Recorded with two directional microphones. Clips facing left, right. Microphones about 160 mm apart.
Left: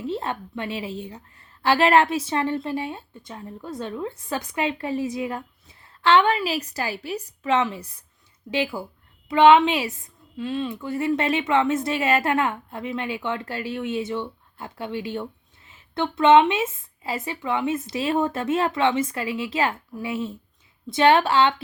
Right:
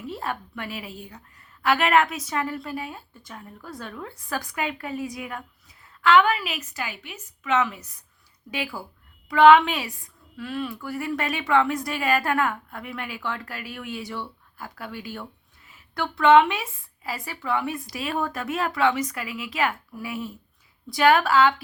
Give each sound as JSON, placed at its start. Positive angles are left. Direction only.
{"t": 0.0, "sound": "speech", "side_deg": 25}